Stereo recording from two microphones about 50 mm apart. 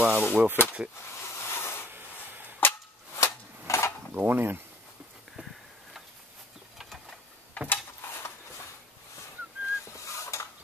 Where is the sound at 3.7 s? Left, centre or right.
Left.